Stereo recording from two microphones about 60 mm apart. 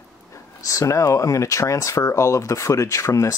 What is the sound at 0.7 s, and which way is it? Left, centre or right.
Speech, left.